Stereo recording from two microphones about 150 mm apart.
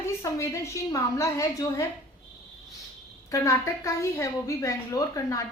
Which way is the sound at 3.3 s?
20° left (ahead or behind).